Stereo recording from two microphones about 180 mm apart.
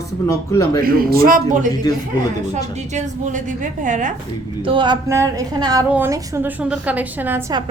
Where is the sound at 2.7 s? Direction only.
40° right (ahead or behind).